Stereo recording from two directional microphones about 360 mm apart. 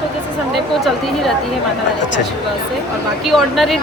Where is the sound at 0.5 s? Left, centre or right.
Centre.